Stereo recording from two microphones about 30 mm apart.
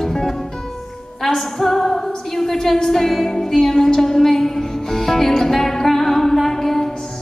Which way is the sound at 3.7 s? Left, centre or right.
Centre.